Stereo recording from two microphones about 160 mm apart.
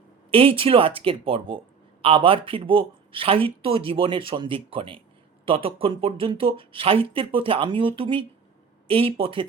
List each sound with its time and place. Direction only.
0.3 s speech: 35° right (ahead or behind)